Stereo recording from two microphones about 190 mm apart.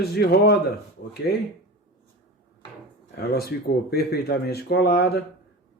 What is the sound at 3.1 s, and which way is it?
Speech, 55° left (ahead or behind).